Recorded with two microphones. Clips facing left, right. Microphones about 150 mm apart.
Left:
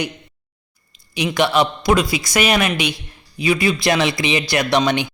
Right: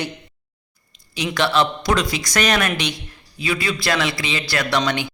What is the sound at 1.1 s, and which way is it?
A man's voice, 15° left (ahead or behind).